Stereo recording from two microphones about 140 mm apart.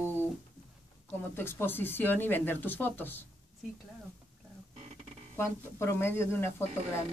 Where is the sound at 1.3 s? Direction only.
15° left (ahead or behind).